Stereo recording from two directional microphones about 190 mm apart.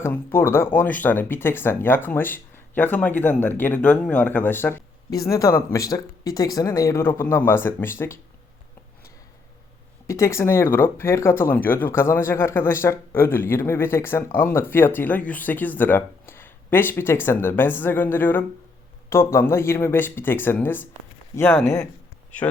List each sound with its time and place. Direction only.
0.0 s speech: 10° left (ahead or behind)
10.1 s speech: 15° left (ahead or behind)